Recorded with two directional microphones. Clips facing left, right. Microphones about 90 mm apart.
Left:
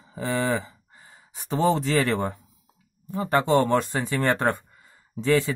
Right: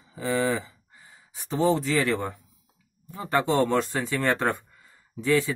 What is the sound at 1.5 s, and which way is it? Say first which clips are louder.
Speech: left 1 dB; 60° left (ahead or behind).